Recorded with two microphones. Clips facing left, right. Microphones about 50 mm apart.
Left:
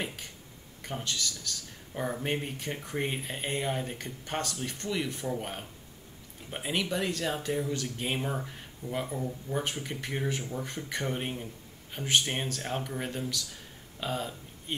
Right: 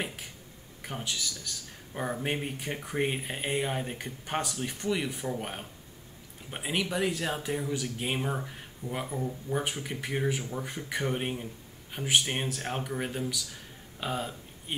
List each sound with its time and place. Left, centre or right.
0.0 s speech: centre